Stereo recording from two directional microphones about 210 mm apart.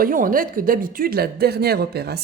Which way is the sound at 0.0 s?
40° right (ahead or behind).